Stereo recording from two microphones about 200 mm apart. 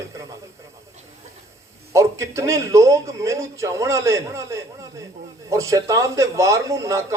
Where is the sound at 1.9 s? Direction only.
15° right (ahead or behind).